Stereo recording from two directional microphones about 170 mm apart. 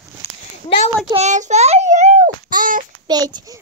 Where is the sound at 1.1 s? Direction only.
45° right (ahead or behind).